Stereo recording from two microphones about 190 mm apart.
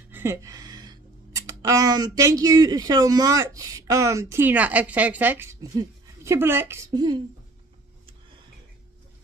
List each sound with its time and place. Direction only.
0.1 s speech: 10° right (ahead or behind)